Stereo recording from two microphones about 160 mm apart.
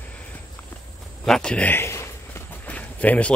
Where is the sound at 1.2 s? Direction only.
5° left (ahead or behind).